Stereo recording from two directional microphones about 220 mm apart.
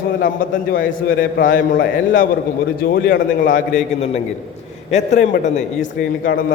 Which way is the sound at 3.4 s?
35° left (ahead or behind).